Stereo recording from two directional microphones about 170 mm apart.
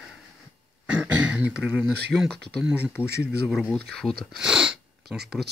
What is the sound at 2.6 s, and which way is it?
Speech, 10° right (ahead or behind).